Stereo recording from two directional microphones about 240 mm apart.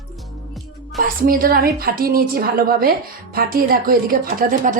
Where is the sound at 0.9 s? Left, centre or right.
Right.